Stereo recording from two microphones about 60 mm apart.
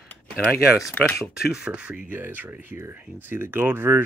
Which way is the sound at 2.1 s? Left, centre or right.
Right.